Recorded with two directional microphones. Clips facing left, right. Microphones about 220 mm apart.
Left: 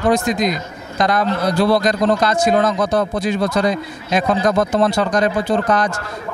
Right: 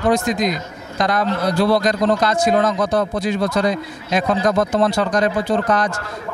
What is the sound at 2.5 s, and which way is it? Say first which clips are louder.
Speech: left 1 dB; 25° left (ahead or behind).